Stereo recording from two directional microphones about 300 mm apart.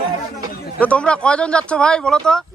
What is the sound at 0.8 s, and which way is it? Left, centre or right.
Speech, centre.